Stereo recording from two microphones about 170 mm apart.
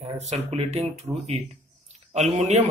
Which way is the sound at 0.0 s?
40° right (ahead or behind).